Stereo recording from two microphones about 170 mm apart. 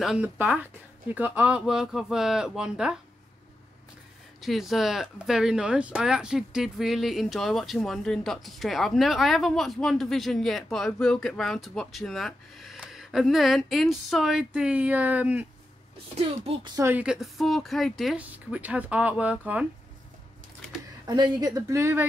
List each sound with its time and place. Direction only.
0.0 s speech: 5° right (ahead or behind)
4.4 s speech: centre (ahead or behind)
16.7 s speech: 15° right (ahead or behind)
17.0 s speech: 5° right (ahead or behind)
21.0 s speech: 25° right (ahead or behind)